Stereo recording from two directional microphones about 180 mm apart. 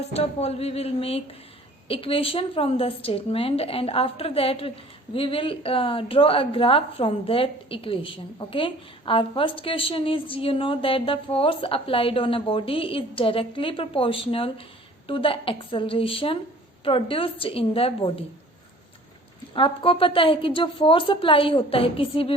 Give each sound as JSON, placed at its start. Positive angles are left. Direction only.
{"t": 0.1, "sound": "a woman's voice", "side_deg": 35}
{"t": 19.5, "sound": "a woman's voice", "side_deg": 30}